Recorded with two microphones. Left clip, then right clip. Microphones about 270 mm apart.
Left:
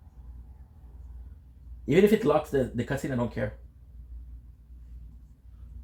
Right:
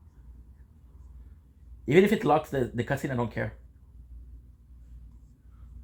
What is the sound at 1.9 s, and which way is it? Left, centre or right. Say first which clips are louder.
Speech: even; right.